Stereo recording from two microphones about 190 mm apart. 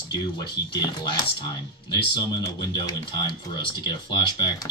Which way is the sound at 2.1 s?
20° left (ahead or behind).